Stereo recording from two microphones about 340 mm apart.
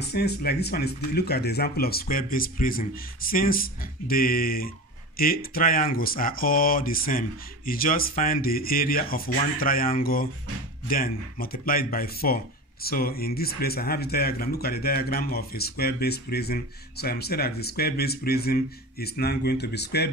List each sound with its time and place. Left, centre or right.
0.1 s speech: left